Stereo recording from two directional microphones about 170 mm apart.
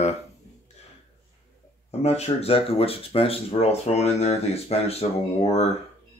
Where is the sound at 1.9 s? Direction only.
40° left (ahead or behind).